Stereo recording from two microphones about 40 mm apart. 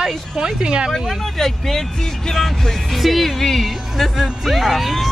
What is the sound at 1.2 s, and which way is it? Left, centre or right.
Speech, centre.